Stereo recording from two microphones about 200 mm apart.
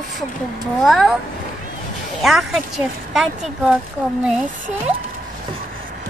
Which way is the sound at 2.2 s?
Centre (ahead or behind).